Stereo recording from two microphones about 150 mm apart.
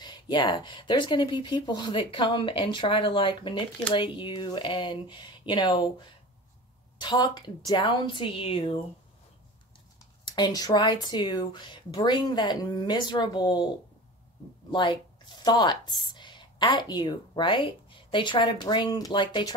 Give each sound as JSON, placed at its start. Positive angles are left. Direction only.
{"t": 0.0, "sound": "speech", "side_deg": 30}
{"t": 10.2, "sound": "speech", "side_deg": 25}
{"t": 14.7, "sound": "speech", "side_deg": 30}